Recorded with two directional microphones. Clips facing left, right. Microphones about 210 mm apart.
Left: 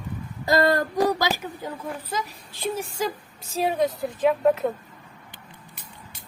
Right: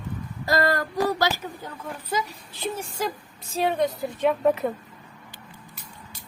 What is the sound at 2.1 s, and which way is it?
A woman's voice, centre (ahead or behind).